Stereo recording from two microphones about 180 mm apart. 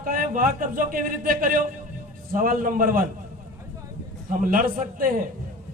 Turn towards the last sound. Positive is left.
turn(degrees=-50)  # may be behind; listen again after turning